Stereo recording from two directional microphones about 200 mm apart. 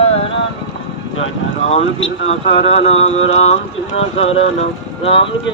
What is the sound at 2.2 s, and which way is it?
Speech, 30° left (ahead or behind).